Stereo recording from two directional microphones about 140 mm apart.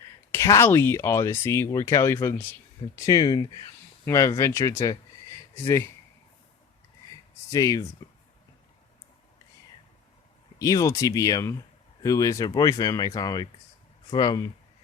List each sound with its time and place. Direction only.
0.3 s speech: 20° left (ahead or behind)
7.1 s a sound: 25° left (ahead or behind)
10.6 s speech: 25° left (ahead or behind)